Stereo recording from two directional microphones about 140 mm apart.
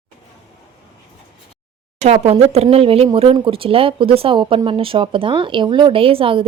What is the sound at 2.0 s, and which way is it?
Speech, 50° right (ahead or behind).